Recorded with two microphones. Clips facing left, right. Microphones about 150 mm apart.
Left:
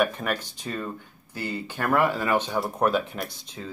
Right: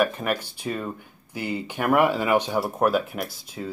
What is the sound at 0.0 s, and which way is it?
Speech, 5° right (ahead or behind).